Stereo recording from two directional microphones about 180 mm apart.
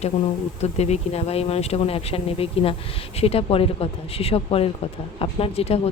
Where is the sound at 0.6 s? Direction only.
35° left (ahead or behind).